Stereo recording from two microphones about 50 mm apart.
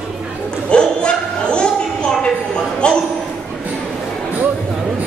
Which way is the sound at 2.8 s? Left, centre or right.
Left.